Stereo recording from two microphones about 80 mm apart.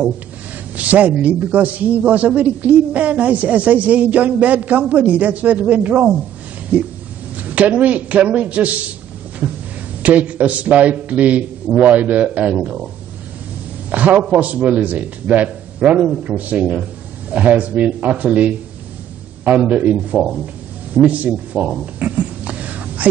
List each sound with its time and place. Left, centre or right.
0.7 s a man's voice: centre
7.3 s a man's voice: centre
13.8 s a man's voice: centre
20.9 s a sound: centre